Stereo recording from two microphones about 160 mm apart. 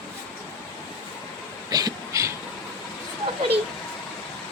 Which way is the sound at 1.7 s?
20° right (ahead or behind).